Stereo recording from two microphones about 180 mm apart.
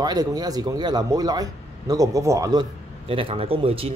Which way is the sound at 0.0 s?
20° right (ahead or behind).